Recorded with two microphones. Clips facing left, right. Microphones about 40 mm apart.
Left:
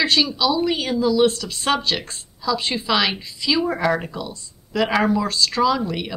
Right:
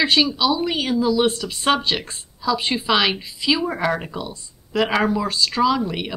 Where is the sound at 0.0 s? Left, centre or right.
Centre.